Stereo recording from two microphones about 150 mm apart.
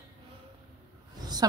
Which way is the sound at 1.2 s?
25° right (ahead or behind).